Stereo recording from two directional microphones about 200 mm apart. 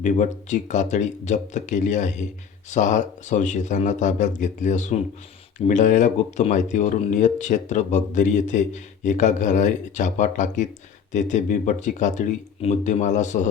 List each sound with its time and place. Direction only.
0.0 s speech: 35° left (ahead or behind)